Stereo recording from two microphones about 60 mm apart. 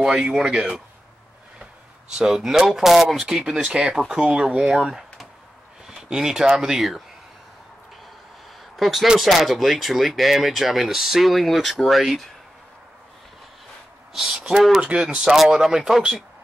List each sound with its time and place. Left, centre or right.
0.2 s speech: centre
2.1 s speech: centre
8.7 s speech: centre
14.1 s speech: centre
14.8 s speech: centre
15.2 s speech: centre